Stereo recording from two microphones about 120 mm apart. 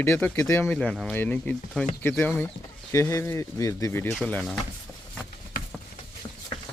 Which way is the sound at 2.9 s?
25° left (ahead or behind).